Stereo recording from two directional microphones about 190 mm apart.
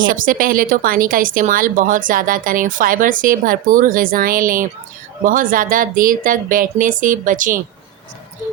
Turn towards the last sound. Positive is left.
turn(degrees=-45)  # may be behind; listen again after turning